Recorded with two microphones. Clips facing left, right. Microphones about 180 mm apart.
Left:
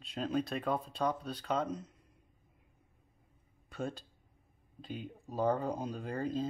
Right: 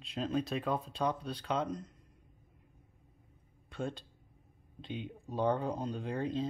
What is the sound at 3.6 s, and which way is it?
Speech, 5° left (ahead or behind).